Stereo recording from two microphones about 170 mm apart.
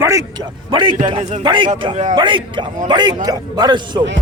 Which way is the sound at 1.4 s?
30° right (ahead or behind).